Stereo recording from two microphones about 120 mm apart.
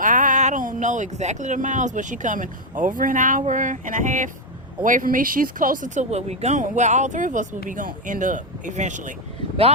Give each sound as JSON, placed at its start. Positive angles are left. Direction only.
{"t": 0.0, "sound": "speech", "side_deg": -90}